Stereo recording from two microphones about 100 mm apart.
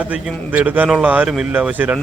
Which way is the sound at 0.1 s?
15° right (ahead or behind).